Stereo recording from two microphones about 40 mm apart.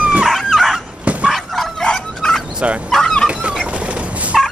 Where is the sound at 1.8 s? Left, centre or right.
Centre.